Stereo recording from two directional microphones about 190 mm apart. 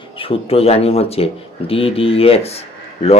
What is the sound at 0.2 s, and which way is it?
Speech, 30° left (ahead or behind).